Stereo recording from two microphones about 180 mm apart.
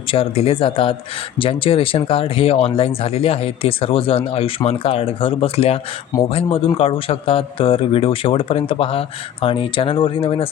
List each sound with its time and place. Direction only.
0.1 s speech: 30° left (ahead or behind)
6.1 s speech: 15° left (ahead or behind)
6.7 s speech: 30° left (ahead or behind)